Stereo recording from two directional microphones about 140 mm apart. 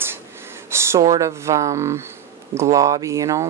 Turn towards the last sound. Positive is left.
turn(degrees=-20)  # may be behind; listen again after turning